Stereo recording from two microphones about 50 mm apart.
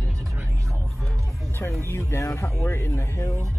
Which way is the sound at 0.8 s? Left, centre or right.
Centre.